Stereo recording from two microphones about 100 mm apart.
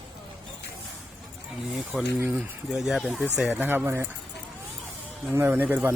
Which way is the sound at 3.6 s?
20° right (ahead or behind).